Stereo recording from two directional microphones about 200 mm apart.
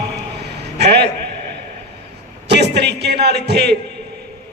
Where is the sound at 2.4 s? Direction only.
55° right (ahead or behind).